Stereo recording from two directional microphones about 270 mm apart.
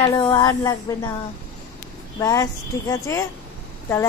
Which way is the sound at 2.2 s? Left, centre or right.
Centre.